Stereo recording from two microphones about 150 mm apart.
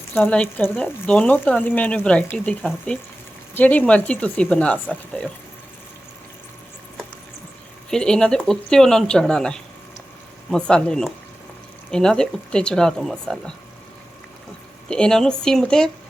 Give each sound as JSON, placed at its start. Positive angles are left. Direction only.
{"t": 0.2, "sound": "speech", "side_deg": 5}
{"t": 7.9, "sound": "speech", "side_deg": 5}
{"t": 14.8, "sound": "speech", "side_deg": 5}